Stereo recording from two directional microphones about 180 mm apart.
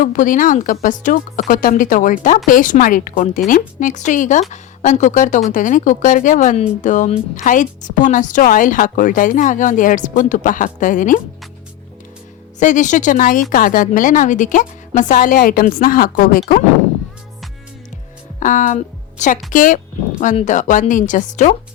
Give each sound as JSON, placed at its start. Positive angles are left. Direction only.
{"t": 0.0, "sound": "speech", "side_deg": 45}
{"t": 12.5, "sound": "speech", "side_deg": 45}
{"t": 18.3, "sound": "speech", "side_deg": 45}